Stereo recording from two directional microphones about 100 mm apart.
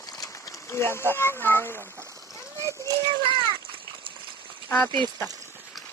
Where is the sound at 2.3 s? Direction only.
30° left (ahead or behind).